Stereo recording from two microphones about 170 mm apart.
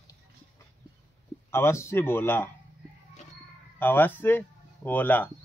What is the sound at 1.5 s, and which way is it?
Speech, 15° left (ahead or behind).